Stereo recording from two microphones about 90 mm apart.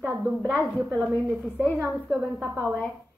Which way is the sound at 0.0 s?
25° right (ahead or behind).